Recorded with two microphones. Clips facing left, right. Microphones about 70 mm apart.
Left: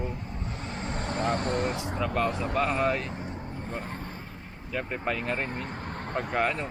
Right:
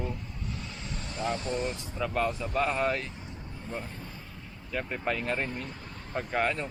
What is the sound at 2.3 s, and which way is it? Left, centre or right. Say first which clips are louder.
Speech: left 3 dB; left.